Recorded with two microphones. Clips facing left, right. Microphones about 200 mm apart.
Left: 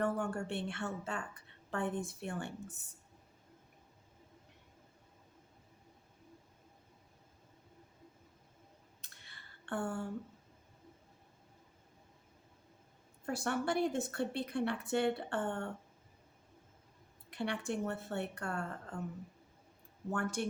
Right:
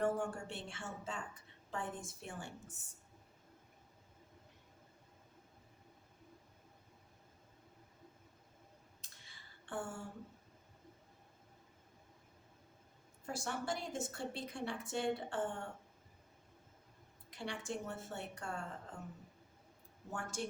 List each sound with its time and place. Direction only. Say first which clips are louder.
0.0 s a woman's voice: left 2 dB; 60° left (ahead or behind)
9.0 s a sound: left 2 dB; 60° left (ahead or behind)
13.2 s a woman's voice: left 6 dB; 60° left (ahead or behind)
17.3 s a woman's voice: left 6 dB; 60° left (ahead or behind)
20.1 s a woman's voice: left 6 dB; 60° left (ahead or behind)